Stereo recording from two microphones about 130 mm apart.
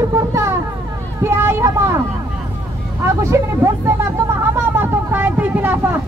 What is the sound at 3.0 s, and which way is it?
Speech, 20° right (ahead or behind).